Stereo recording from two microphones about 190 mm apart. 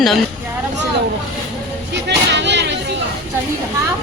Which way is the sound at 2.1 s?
65° right (ahead or behind).